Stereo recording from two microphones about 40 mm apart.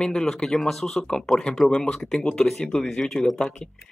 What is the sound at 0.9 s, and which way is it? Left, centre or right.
Speech, centre.